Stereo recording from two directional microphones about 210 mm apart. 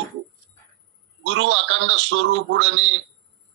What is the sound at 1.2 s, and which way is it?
Speech, 60° right (ahead or behind).